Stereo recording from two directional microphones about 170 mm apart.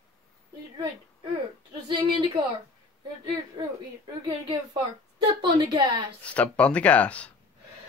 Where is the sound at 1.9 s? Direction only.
25° right (ahead or behind).